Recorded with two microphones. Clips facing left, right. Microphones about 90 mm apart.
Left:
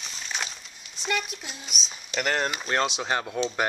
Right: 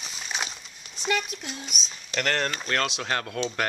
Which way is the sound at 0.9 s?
Centre (ahead or behind).